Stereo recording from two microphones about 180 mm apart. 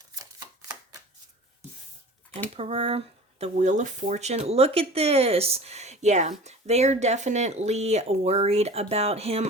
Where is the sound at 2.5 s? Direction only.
30° right (ahead or behind).